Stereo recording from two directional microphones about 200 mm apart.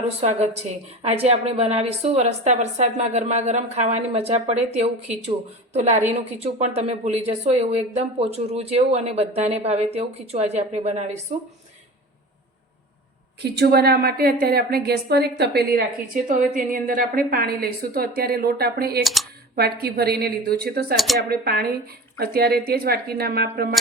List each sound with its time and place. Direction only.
0.2 s a woman's voice: 30° right (ahead or behind)
13.4 s a woman's voice: 55° right (ahead or behind)
19.0 s speech: centre (ahead or behind)
19.5 s a woman's voice: 50° right (ahead or behind)
20.9 s speech: centre (ahead or behind)
21.2 s a woman's voice: 50° right (ahead or behind)